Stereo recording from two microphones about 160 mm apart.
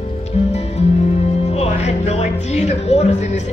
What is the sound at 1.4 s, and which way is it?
Music, 40° left (ahead or behind).